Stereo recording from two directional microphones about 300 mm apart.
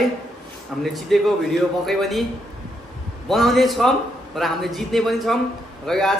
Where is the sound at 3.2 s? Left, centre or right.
Centre.